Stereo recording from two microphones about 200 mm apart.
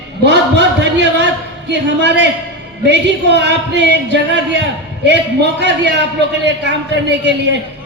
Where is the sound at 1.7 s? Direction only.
60° right (ahead or behind).